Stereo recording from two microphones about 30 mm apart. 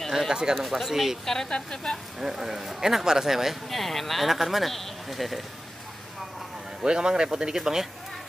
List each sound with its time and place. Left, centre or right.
0.3 s speech: right
0.7 s speech: centre
1.2 s speech: centre
2.1 s speech: centre
3.7 s speech: centre
6.8 s speech: right
7.5 s speech: centre